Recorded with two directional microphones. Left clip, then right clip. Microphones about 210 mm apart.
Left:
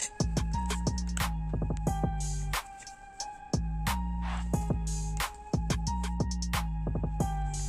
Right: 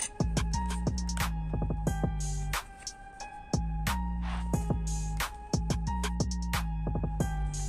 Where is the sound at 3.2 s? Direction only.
65° left (ahead or behind).